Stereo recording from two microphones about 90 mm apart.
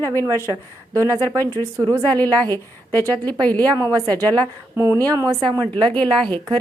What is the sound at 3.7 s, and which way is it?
Speech, 45° right (ahead or behind).